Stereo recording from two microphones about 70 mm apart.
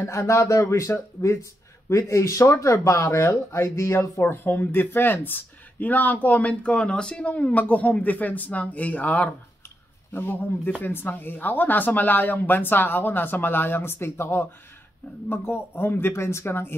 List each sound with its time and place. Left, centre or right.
0.0 s speech: left
10.1 s speech: left